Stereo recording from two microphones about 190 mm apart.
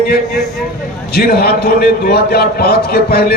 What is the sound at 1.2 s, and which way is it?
A man's voice, 55° left (ahead or behind).